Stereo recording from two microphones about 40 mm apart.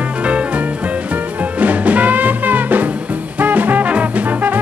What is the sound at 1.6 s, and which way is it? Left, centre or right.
Music, right.